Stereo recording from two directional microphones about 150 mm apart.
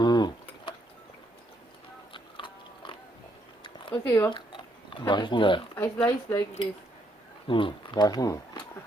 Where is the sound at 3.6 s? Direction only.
35° left (ahead or behind).